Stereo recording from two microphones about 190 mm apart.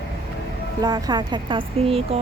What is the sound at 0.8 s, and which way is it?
Speech, 20° right (ahead or behind).